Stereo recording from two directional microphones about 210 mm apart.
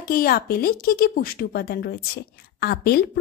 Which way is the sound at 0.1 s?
45° left (ahead or behind).